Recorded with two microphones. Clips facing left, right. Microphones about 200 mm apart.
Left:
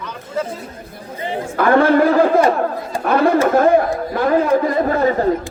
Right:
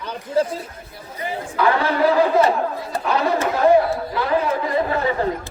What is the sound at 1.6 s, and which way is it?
Speech, 50° left (ahead or behind).